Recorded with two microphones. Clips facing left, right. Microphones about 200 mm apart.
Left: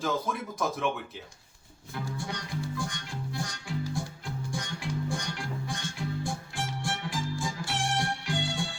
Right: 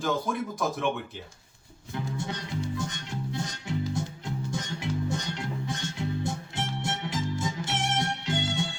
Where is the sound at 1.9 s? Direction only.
20° right (ahead or behind).